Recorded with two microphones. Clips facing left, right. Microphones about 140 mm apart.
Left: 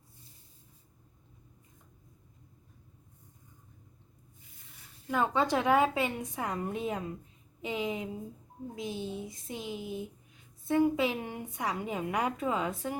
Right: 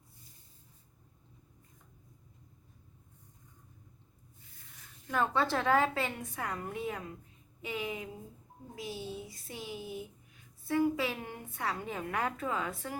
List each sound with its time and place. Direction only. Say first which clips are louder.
5.0 s a woman's voice: left 2 dB; 15° left (ahead or behind)
7.6 s a sound: left 4 dB; 20° left (ahead or behind)
10.7 s a woman's voice: left 3 dB; 20° left (ahead or behind)